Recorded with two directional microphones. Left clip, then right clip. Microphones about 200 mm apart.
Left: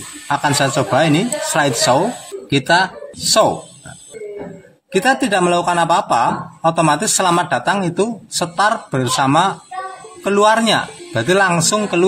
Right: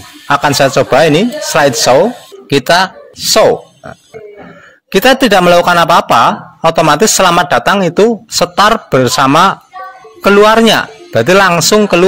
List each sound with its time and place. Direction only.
0.3 s speech: 45° right (ahead or behind)
4.9 s speech: 45° right (ahead or behind)